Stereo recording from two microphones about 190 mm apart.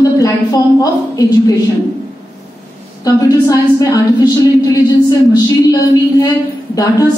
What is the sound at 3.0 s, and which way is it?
A woman's voice, 20° left (ahead or behind).